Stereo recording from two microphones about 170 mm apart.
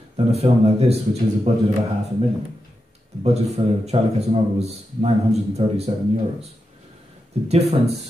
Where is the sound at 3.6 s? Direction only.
35° right (ahead or behind).